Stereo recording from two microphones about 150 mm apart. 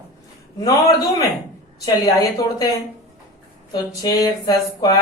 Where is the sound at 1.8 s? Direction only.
25° left (ahead or behind).